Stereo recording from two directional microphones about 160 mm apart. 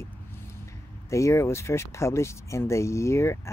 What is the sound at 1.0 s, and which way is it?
Speech, 20° left (ahead or behind).